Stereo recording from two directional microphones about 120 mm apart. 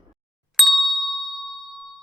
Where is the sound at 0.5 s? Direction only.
Centre (ahead or behind).